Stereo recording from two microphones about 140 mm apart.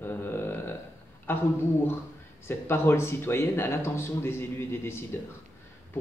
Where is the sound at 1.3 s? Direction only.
15° left (ahead or behind).